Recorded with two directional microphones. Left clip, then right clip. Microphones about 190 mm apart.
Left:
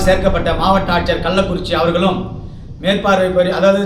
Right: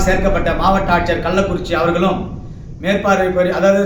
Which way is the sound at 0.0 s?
20° left (ahead or behind).